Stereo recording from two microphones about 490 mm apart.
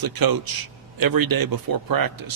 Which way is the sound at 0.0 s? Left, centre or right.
Right.